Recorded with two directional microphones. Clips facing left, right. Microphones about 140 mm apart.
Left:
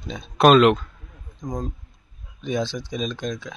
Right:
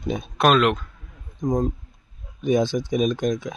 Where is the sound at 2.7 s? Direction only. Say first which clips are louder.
Right 7 dB; 50° right (ahead or behind).